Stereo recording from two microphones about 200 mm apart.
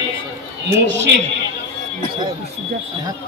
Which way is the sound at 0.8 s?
65° right (ahead or behind).